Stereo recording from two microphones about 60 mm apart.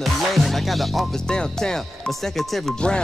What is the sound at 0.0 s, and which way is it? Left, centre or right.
Music, centre.